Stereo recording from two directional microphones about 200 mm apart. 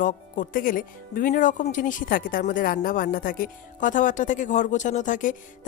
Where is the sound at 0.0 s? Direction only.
40° left (ahead or behind).